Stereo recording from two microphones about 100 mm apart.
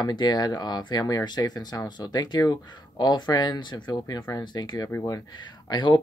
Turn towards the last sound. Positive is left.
turn(degrees=50)  # may be behind; listen again after turning